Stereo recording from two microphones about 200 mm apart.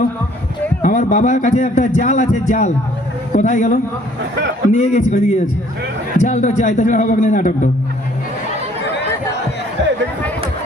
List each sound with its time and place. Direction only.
0.8 s speech: 35° left (ahead or behind)